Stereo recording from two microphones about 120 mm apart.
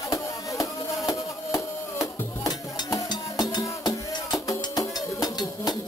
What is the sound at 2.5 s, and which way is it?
Music, 35° left (ahead or behind).